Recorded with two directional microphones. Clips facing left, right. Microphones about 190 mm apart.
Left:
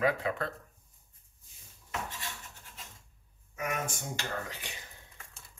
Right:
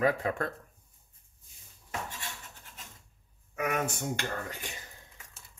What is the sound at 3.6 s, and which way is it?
Speech, 60° right (ahead or behind).